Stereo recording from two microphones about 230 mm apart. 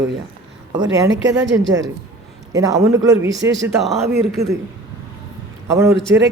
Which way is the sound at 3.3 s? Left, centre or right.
Right.